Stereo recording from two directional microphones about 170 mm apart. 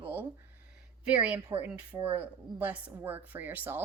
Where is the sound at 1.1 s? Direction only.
5° right (ahead or behind).